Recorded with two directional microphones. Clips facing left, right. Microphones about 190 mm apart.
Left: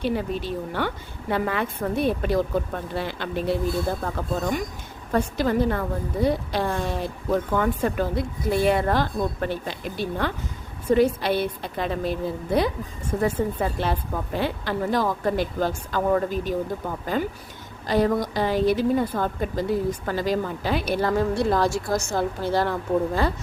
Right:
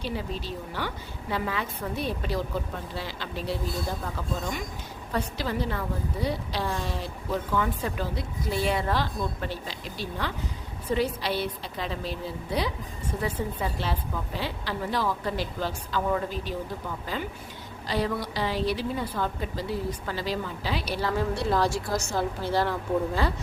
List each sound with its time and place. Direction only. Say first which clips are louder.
0.0 s a woman's voice: left 7 dB; 55° left (ahead or behind)